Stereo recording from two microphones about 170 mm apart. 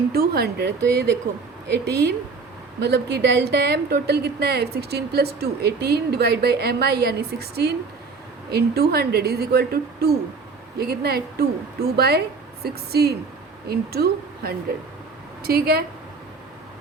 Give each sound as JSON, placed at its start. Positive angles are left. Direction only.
{"t": 0.1, "sound": "speech", "side_deg": -65}
{"t": 1.6, "sound": "a woman's voice", "side_deg": -85}